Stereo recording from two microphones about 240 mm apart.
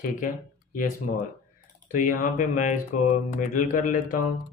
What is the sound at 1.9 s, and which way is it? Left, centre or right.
Speech, left.